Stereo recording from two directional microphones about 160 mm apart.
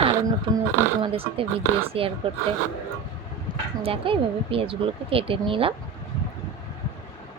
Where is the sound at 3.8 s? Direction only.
35° right (ahead or behind).